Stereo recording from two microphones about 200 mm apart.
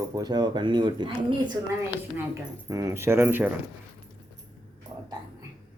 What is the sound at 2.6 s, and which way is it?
Speech, 15° right (ahead or behind).